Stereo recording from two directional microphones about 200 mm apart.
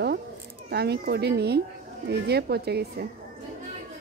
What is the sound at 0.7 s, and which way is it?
Speech, 55° right (ahead or behind).